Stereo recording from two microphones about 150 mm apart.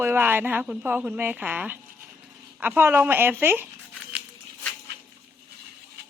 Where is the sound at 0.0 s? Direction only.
15° right (ahead or behind).